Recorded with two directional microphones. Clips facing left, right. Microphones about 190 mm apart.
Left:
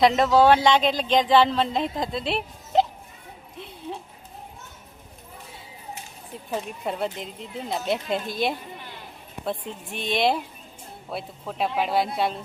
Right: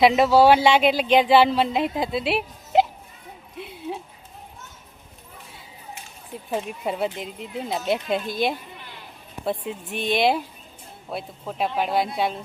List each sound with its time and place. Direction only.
0.0 s speech: 5° right (ahead or behind)
6.5 s speech: 5° right (ahead or behind)